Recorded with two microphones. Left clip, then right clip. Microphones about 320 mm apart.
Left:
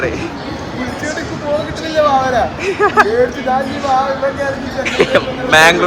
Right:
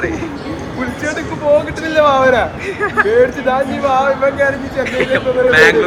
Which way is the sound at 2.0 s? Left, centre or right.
Centre.